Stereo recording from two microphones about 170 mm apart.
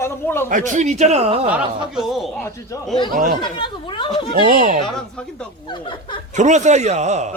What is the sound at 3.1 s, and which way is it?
Speech, 55° right (ahead or behind).